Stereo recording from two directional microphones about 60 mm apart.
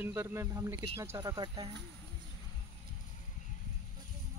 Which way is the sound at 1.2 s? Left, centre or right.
Right.